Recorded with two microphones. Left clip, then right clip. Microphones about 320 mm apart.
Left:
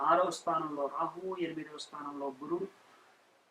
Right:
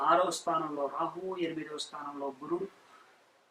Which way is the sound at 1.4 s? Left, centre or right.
Centre.